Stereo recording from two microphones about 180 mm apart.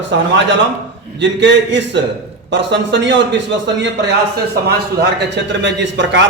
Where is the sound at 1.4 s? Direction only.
85° right.